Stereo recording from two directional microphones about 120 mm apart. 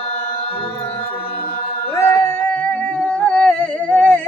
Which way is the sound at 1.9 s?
20° left (ahead or behind).